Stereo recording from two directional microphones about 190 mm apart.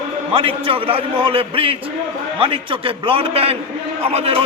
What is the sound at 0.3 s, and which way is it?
A man's voice, 30° right (ahead or behind).